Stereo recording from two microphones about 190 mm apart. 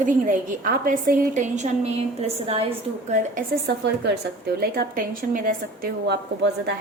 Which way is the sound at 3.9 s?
60° right (ahead or behind).